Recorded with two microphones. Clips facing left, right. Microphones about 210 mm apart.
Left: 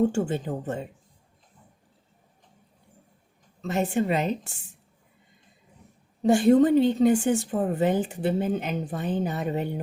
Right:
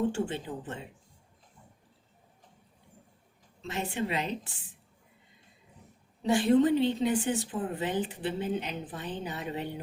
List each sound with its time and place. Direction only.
0.0 s a woman's voice: 45° left (ahead or behind)
3.6 s a woman's voice: 45° left (ahead or behind)
6.2 s a woman's voice: 45° left (ahead or behind)